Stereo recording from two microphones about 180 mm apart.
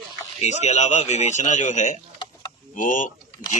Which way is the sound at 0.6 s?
40° left (ahead or behind).